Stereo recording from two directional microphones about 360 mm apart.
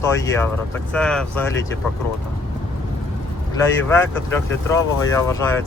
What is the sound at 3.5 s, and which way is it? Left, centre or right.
Speech, centre.